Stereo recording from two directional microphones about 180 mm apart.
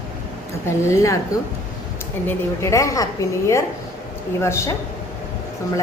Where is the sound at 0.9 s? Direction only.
15° left (ahead or behind).